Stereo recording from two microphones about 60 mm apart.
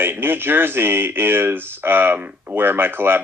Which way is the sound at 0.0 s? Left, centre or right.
Right.